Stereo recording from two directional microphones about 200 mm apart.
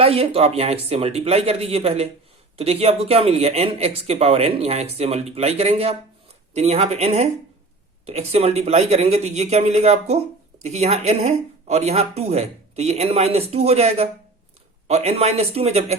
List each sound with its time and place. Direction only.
0.0 s speech: 30° right (ahead or behind)